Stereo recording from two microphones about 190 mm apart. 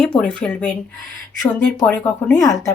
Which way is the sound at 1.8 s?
5° left (ahead or behind).